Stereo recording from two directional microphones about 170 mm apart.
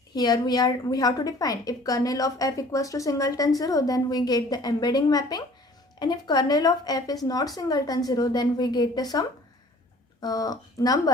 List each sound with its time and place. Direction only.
0.1 s a woman's voice: 25° left (ahead or behind)